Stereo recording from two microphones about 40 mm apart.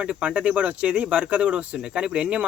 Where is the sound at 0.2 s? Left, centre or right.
Right.